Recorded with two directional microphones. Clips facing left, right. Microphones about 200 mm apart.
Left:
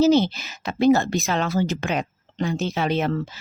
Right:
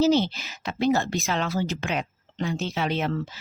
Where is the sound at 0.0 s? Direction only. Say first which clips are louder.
Left 4 dB; 45° left (ahead or behind).